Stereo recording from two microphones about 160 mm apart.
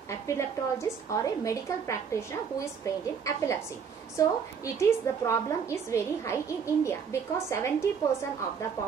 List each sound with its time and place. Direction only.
0.3 s a woman's voice: 15° left (ahead or behind)